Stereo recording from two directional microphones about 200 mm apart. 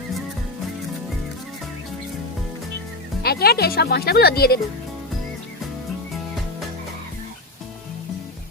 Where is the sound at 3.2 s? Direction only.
50° left (ahead or behind).